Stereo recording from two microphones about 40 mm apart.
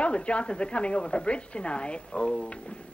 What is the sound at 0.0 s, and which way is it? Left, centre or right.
A man's voice, left.